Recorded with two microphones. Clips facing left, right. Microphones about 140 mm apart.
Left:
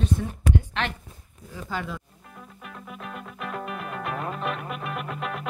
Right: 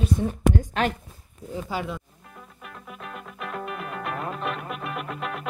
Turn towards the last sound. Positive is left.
turn(degrees=0)  # may be behind; listen again after turning